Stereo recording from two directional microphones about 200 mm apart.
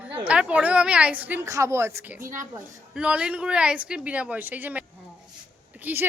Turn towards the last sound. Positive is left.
turn(degrees=-10)  # may be behind; listen again after turning